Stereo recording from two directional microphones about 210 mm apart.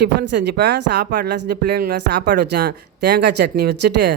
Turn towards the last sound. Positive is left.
turn(degrees=-50)  # may be behind; listen again after turning